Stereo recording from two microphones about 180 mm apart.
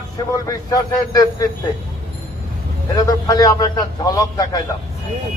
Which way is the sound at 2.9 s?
20° left (ahead or behind).